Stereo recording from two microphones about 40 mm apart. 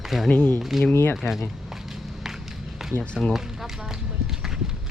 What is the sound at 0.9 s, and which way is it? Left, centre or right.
Speech, left.